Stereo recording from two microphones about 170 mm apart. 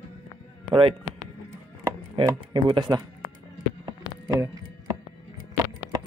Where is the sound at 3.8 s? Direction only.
20° right (ahead or behind).